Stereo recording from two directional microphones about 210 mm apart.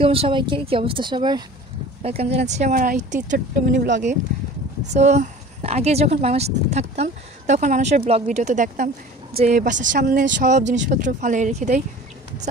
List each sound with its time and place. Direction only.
0.0 s speech: 25° right (ahead or behind)